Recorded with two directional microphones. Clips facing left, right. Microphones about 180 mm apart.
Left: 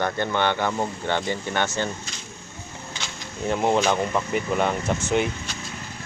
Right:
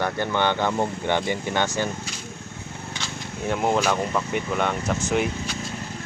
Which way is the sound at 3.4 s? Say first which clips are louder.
Left 1 dB; centre (ahead or behind).